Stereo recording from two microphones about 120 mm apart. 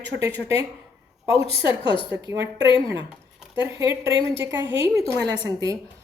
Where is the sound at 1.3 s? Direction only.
50° left (ahead or behind).